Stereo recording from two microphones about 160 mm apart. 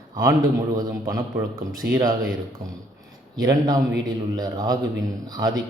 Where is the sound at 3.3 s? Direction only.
25° right (ahead or behind).